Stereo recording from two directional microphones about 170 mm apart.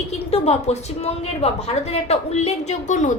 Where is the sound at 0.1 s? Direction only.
40° left (ahead or behind).